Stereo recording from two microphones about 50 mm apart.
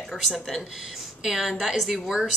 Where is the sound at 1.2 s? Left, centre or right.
Centre.